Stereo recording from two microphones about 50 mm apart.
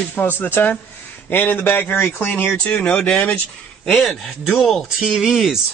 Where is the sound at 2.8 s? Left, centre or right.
Left.